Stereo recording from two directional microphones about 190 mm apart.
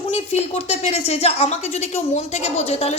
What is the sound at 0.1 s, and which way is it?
A woman's voice, 35° left (ahead or behind).